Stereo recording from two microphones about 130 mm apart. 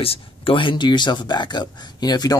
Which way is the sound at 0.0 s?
45° left (ahead or behind).